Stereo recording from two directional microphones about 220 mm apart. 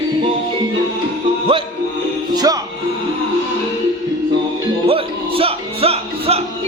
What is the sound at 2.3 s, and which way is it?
Music, 15° right (ahead or behind).